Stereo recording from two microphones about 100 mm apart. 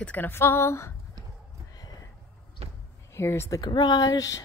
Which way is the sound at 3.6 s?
45° left (ahead or behind).